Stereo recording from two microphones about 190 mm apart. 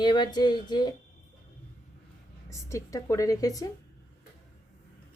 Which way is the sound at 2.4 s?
15° left (ahead or behind).